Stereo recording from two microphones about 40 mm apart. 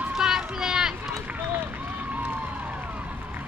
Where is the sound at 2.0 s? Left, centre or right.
Right.